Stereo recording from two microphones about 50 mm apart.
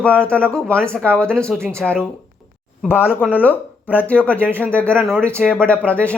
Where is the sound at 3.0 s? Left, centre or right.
Right.